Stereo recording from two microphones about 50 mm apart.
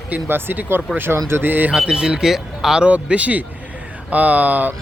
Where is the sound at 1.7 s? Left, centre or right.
Centre.